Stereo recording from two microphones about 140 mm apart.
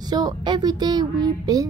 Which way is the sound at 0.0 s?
30° right (ahead or behind).